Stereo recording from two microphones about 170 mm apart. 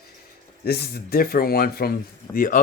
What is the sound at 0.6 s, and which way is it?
Speech, 65° left (ahead or behind).